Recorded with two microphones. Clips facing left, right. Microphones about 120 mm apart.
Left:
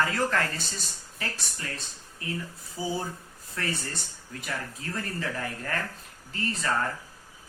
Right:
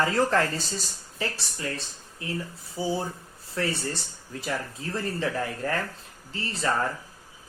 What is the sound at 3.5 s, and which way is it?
Speech, 30° right (ahead or behind).